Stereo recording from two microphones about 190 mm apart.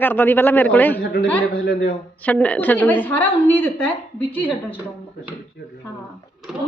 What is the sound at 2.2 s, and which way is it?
A woman's voice, 5° left (ahead or behind).